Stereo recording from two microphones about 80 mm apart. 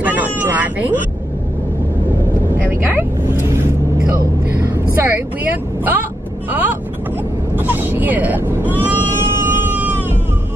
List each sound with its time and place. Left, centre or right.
0.0 s cat: right
3.0 s vehicle: right
4.9 s vehicle: right
9.7 s cat: right